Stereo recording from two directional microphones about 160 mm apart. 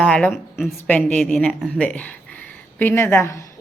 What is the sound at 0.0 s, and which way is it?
Speech, 5° left (ahead or behind).